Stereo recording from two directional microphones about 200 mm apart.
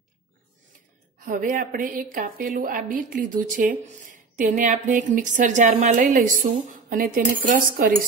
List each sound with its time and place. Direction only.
1.2 s a woman's voice: 45° right (ahead or behind)